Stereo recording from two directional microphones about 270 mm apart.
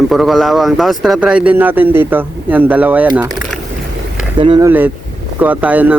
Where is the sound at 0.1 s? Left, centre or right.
Centre.